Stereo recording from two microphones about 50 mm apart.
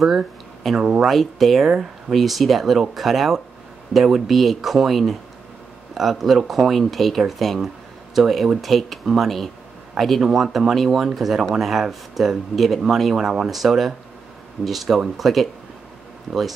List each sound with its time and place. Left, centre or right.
0.7 s speech: centre
1.0 s speech: centre